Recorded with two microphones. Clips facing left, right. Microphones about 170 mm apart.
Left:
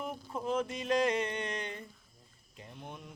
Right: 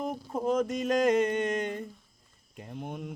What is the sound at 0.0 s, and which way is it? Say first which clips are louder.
Music: right 7 dB; 40° right (ahead or behind).